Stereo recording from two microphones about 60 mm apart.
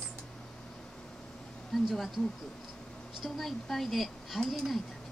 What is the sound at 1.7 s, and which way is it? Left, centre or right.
Speech, centre.